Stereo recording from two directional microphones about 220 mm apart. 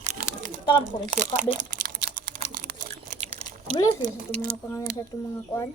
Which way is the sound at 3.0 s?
30° right (ahead or behind).